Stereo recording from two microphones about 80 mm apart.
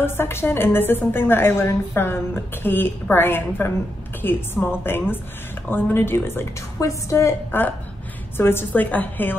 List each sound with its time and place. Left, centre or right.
0.0 s a woman's voice: left
6.8 s a woman's voice: left